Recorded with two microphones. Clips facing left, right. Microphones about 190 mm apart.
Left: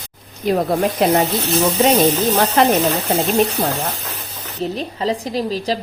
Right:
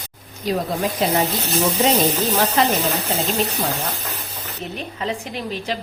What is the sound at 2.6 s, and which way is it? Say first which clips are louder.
Speech: left 5 dB; 55° left (ahead or behind).